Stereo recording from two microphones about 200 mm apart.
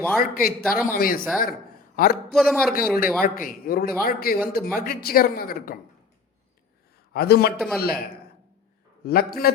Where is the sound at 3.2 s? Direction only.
45° left (ahead or behind).